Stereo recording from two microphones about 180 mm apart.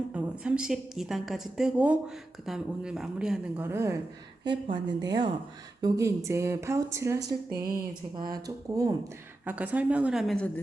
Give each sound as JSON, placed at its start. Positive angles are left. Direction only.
{"t": 0.1, "sound": "a woman's voice", "side_deg": -5}
{"t": 9.5, "sound": "a woman's voice", "side_deg": -10}